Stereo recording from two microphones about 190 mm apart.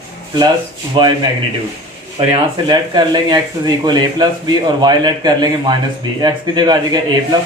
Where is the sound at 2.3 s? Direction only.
20° right (ahead or behind).